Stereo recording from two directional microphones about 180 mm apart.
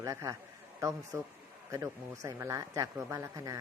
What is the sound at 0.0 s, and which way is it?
Speech, 15° right (ahead or behind).